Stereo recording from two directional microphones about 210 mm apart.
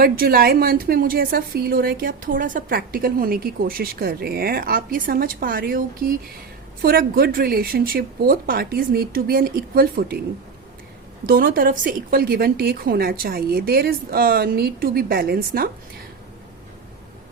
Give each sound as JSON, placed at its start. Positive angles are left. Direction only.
{"t": 0.0, "sound": "a woman's voice", "side_deg": -45}
{"t": 11.3, "sound": "a woman's voice", "side_deg": -45}